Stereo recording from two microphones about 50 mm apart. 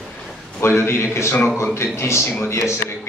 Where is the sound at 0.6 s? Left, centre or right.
Left.